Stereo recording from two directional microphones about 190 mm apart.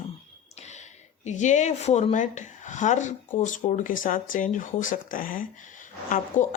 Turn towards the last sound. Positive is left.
turn(degrees=45)  # may be behind; listen again after turning